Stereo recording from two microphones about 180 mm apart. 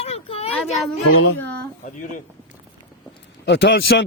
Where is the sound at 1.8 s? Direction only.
45° left (ahead or behind).